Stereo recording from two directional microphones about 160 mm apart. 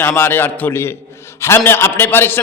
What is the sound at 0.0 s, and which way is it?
A man's voice, 15° left (ahead or behind).